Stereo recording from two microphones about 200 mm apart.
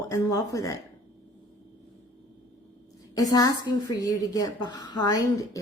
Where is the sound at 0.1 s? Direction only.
15° left (ahead or behind).